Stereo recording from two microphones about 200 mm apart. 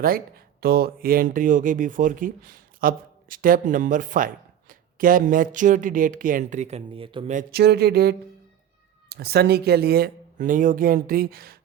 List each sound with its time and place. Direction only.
0.0 s speech: 50° right (ahead or behind); by 7.3 s 25° right (ahead or behind)
7.3 s speech: 50° right (ahead or behind)